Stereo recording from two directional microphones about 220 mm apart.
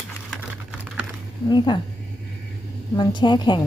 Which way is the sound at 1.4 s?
20° left (ahead or behind).